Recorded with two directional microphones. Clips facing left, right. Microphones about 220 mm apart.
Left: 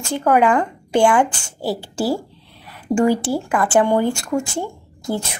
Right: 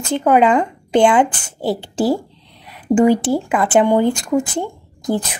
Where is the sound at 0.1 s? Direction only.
20° right (ahead or behind).